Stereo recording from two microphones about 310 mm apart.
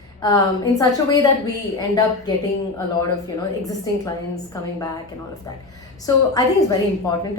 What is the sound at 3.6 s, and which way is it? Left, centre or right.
Speech, centre.